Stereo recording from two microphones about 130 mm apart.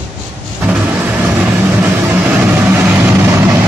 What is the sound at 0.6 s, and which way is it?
Vehicle, 15° right (ahead or behind).